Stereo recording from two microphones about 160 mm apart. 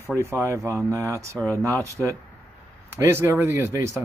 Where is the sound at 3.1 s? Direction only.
15° right (ahead or behind).